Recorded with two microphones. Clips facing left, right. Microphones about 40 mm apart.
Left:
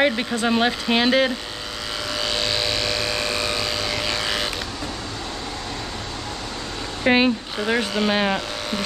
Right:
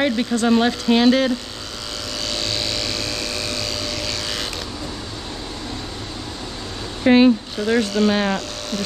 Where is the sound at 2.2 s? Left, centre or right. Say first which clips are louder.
Left 2 dB; centre.